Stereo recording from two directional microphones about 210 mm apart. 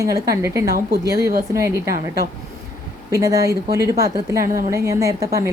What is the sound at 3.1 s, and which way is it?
A woman's voice, 15° right (ahead or behind).